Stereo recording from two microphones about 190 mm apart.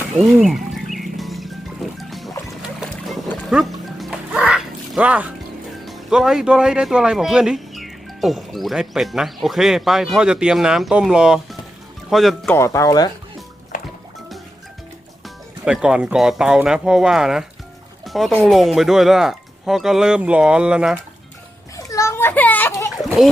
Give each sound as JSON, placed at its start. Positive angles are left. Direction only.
{"t": 0.3, "sound": "a man's voice", "side_deg": 0}
{"t": 0.9, "sound": "music", "side_deg": 0}
{"t": 2.6, "sound": "boat", "side_deg": 0}
{"t": 3.4, "sound": "music", "side_deg": 0}
{"t": 5.8, "sound": "a man's voice", "side_deg": 0}
{"t": 12.5, "sound": "speech", "side_deg": 15}
{"t": 13.7, "sound": "music", "side_deg": 40}
{"t": 15.6, "sound": "a man's voice", "side_deg": -5}
{"t": 21.8, "sound": "children playing", "side_deg": 15}
{"t": 22.9, "sound": "a sound", "side_deg": 0}